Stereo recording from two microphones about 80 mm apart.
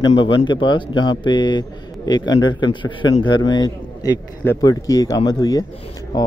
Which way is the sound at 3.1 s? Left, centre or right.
Left.